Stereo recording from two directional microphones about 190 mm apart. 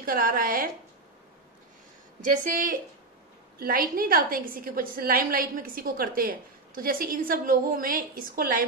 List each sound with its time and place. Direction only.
0.0 s a woman's voice: 50° right (ahead or behind)
2.2 s a woman's voice: 45° right (ahead or behind)